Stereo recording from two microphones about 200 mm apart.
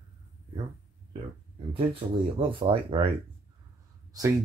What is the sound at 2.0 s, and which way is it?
Speech, 25° right (ahead or behind).